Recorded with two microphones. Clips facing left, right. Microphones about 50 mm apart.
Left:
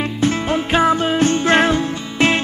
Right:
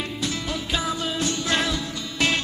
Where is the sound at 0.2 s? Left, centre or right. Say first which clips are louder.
Left 13 dB; left.